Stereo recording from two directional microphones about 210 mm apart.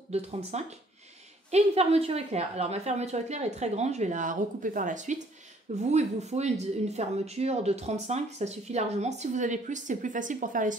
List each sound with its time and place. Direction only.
0.1 s speech: 30° right (ahead or behind)